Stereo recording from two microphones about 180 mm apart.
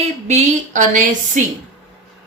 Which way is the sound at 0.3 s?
40° right (ahead or behind).